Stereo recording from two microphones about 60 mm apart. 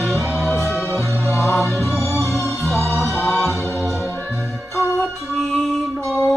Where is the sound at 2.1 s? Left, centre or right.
Left.